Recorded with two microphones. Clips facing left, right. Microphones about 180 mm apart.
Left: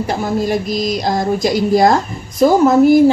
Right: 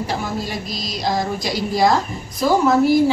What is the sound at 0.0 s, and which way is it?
A woman's voice, 50° left (ahead or behind).